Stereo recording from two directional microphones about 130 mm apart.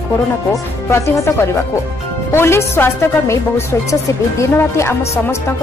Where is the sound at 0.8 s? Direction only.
20° left (ahead or behind).